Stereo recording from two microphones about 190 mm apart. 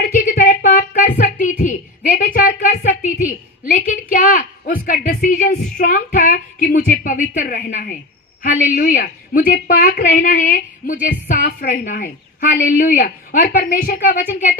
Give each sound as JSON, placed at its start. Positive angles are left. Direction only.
{"t": 0.3, "sound": "a woman's voice", "side_deg": 45}